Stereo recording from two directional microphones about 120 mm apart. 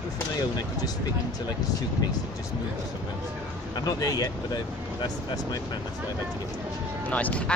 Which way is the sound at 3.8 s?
30° left (ahead or behind).